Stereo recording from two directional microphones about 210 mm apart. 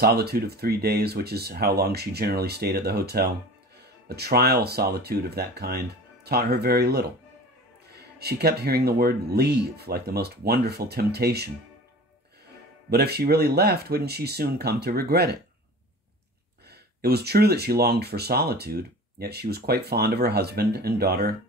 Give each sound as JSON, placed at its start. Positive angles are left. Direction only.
{"t": 0.0, "sound": "speech", "side_deg": -50}
{"t": 12.9, "sound": "speech", "side_deg": -50}
{"t": 16.6, "sound": "speech", "side_deg": -50}